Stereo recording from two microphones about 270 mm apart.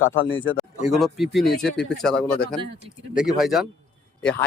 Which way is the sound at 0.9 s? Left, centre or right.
Centre.